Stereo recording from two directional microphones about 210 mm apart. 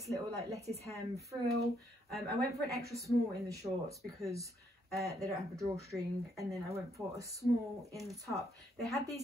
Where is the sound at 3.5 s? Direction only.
15° right (ahead or behind).